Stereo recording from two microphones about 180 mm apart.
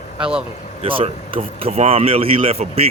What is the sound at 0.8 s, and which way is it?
Speech, 30° right (ahead or behind).